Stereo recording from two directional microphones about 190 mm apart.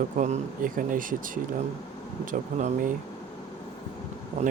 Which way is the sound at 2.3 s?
40° right (ahead or behind).